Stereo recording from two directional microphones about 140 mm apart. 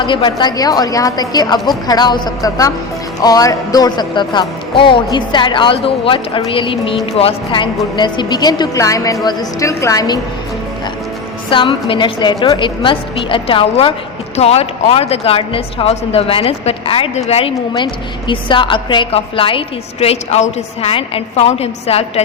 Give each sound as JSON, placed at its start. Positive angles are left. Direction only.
{"t": 0.0, "sound": "a woman's voice", "side_deg": 35}
{"t": 11.5, "sound": "speech", "side_deg": 35}
{"t": 17.7, "sound": "speech", "side_deg": 35}